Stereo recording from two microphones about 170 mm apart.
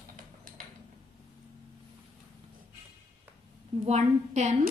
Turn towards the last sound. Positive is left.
turn(degrees=-40)  # may be behind; listen again after turning